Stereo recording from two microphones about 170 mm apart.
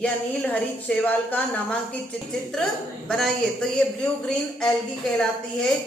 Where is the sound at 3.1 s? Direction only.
5° left (ahead or behind).